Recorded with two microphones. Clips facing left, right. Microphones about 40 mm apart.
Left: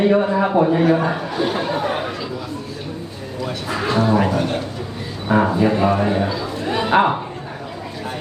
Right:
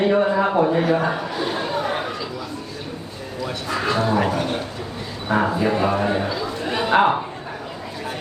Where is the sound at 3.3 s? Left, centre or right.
Centre.